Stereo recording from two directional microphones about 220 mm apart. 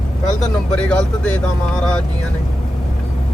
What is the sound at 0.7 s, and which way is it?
Speech, 5° left (ahead or behind).